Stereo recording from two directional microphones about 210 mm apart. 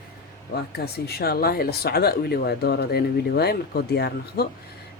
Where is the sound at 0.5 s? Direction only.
50° left (ahead or behind).